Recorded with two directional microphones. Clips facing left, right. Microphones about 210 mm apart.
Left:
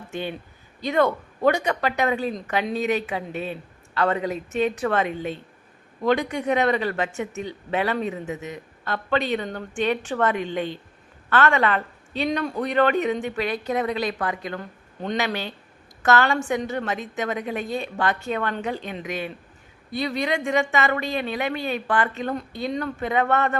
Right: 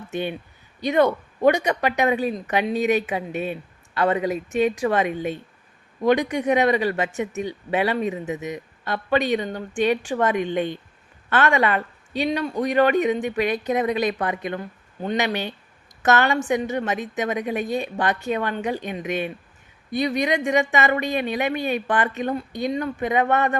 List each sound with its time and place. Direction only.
0.1 s speech: 15° right (ahead or behind)